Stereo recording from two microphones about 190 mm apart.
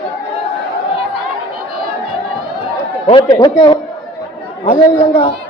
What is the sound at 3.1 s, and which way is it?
Speech, 20° left (ahead or behind).